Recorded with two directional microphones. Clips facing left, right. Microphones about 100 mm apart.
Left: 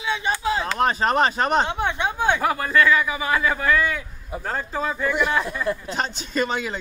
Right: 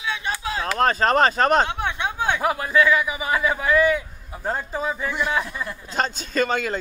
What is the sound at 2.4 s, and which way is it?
A man's voice, 10° right (ahead or behind).